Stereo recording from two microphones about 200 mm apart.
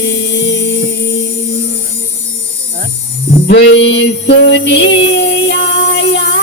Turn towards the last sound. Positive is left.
turn(degrees=65)  # may be behind; listen again after turning